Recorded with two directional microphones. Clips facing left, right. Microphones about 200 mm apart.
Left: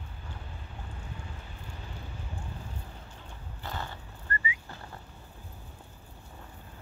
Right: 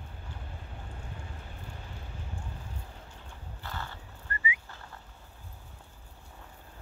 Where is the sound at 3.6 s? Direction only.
20° left (ahead or behind).